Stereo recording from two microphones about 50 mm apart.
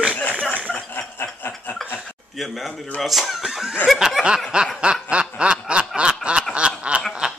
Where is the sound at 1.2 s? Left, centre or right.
Left.